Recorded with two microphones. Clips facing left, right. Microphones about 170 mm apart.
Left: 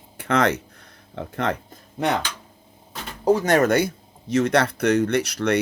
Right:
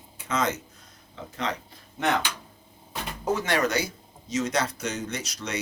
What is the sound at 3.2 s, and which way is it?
Speech, 40° left (ahead or behind).